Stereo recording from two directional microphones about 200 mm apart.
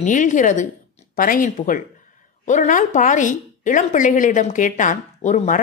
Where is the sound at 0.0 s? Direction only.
40° left (ahead or behind).